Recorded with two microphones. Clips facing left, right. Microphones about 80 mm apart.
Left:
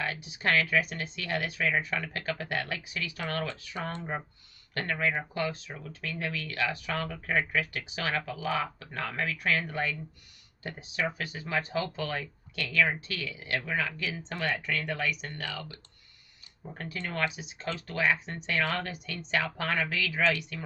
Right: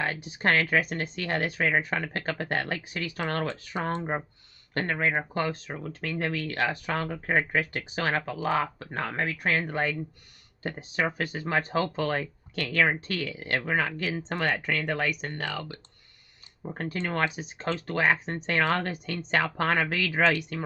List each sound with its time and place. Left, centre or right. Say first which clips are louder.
0.0 s speech: right 4 dB; right
16.6 s speech: right 6 dB; right